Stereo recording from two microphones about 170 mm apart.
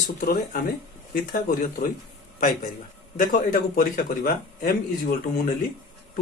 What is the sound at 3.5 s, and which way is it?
Speech, 55° left (ahead or behind).